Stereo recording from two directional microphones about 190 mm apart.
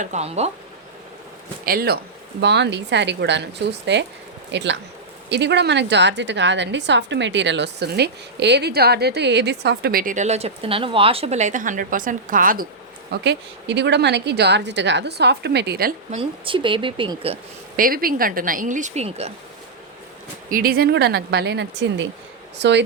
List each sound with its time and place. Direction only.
0.0 s speech: 35° right (ahead or behind)
1.6 s speech: 55° right (ahead or behind)
2.4 s a woman's voice: 65° right (ahead or behind); by 12.6 s 45° right (ahead or behind)
13.1 s a woman's voice: 65° right (ahead or behind)
16.1 s speech: 25° right (ahead or behind)
17.7 s speech: 50° right (ahead or behind)
20.5 s a woman's voice: 50° right (ahead or behind); by 22.8 s 65° right (ahead or behind)